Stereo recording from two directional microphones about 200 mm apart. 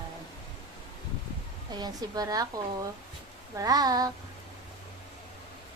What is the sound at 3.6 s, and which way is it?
Child singing, 20° right (ahead or behind).